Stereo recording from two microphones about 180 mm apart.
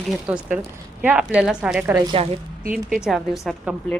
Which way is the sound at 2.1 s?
30° right (ahead or behind).